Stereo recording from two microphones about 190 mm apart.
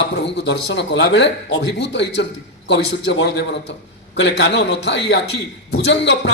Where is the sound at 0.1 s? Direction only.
65° left (ahead or behind).